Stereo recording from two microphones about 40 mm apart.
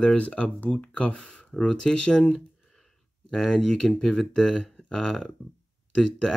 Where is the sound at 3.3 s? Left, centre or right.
Centre.